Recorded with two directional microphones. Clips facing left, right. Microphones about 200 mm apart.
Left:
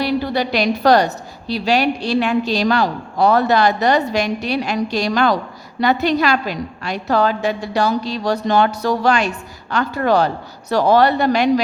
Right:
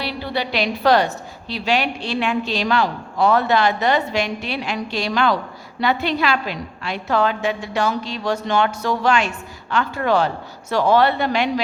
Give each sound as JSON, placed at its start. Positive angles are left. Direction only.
{"t": 0.0, "sound": "a woman's voice", "side_deg": 45}